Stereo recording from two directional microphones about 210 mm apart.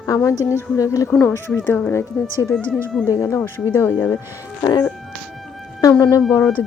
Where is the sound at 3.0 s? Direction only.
15° left (ahead or behind).